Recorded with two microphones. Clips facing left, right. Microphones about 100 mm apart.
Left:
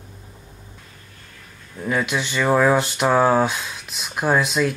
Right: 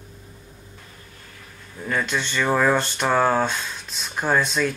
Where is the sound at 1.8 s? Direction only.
5° left (ahead or behind).